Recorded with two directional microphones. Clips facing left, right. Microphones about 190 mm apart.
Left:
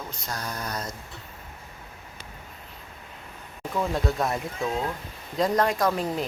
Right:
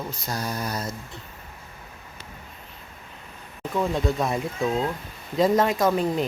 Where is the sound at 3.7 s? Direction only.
Centre (ahead or behind).